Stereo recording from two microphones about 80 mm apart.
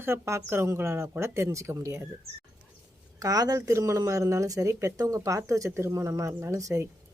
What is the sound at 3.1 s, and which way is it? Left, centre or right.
Speech, right.